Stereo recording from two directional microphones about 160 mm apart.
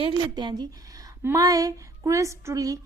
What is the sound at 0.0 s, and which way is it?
A woman's voice, 30° right (ahead or behind).